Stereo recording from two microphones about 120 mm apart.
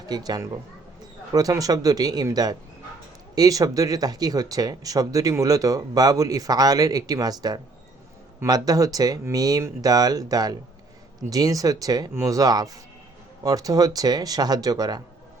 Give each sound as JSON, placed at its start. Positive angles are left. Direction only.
{"t": 0.0, "sound": "speech", "side_deg": -35}